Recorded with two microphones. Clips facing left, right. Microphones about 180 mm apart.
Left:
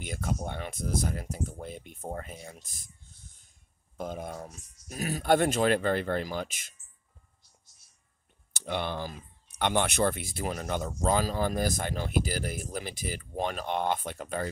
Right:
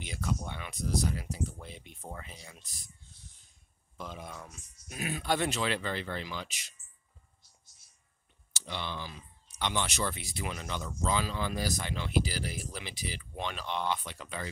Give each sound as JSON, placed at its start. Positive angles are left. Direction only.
{"t": 0.0, "sound": "speech", "side_deg": 50}
{"t": 4.0, "sound": "speech", "side_deg": 50}
{"t": 8.5, "sound": "speech", "side_deg": 55}